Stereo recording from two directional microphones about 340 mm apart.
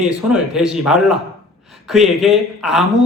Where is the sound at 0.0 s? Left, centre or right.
Centre.